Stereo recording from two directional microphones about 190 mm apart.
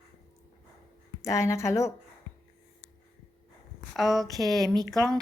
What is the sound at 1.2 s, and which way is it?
Speech, 15° left (ahead or behind).